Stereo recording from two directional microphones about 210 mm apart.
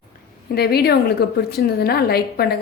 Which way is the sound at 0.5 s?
50° left (ahead or behind).